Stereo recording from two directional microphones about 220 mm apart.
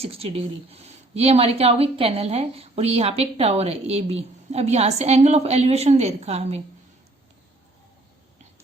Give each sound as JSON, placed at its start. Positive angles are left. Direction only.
{"t": 0.0, "sound": "speech", "side_deg": -25}